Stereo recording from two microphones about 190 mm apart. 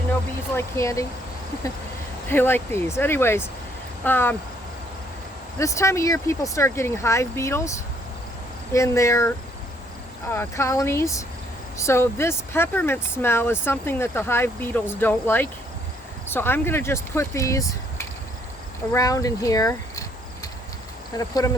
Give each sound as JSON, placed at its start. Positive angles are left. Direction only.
{"t": 0.5, "sound": "speech", "side_deg": 15}
{"t": 2.3, "sound": "speech", "side_deg": 10}
{"t": 5.5, "sound": "speech", "side_deg": 15}
{"t": 10.3, "sound": "speech", "side_deg": 15}
{"t": 18.9, "sound": "a sound", "side_deg": 20}
{"t": 21.2, "sound": "speech", "side_deg": 20}